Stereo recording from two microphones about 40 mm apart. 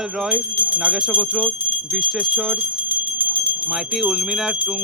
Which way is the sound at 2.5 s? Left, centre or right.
Right.